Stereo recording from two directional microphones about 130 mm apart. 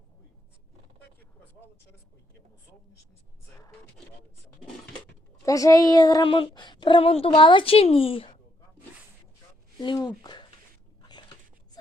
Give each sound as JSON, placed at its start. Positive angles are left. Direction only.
{"t": 5.5, "sound": "speech", "side_deg": 25}
{"t": 9.8, "sound": "speech", "side_deg": 35}